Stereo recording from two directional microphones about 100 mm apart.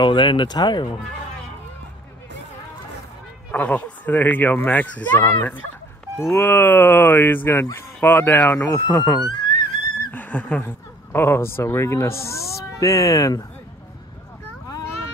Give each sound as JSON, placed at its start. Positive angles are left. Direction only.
{"t": 0.0, "sound": "speech", "side_deg": 55}
{"t": 3.5, "sound": "speech", "side_deg": 15}
{"t": 6.1, "sound": "speech", "side_deg": 30}
{"t": 8.7, "sound": "speech", "side_deg": 25}
{"t": 9.3, "sound": "a sound", "side_deg": 50}
{"t": 10.1, "sound": "a sound", "side_deg": 15}
{"t": 10.6, "sound": "speech", "side_deg": 25}